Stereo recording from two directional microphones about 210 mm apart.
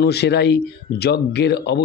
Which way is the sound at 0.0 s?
50° left (ahead or behind).